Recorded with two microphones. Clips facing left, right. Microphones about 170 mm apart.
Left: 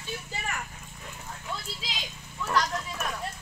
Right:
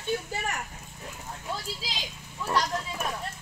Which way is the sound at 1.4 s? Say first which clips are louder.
Right 3 dB; 35° right (ahead or behind).